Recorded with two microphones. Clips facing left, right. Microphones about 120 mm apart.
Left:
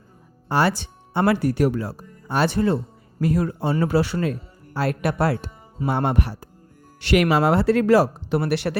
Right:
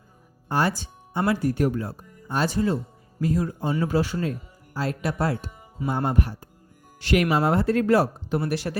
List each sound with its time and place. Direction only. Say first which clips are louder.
0.4 s speech: left 3 dB; 80° left
2.2 s speech: left 3 dB; 70° left (ahead or behind)